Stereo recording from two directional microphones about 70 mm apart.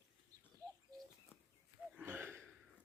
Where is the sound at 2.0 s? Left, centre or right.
Right.